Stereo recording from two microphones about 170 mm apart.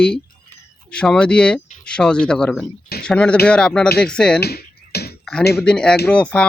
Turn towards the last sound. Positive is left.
turn(degrees=5)  # may be behind; listen again after turning